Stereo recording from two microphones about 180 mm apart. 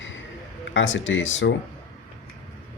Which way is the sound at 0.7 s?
90° left.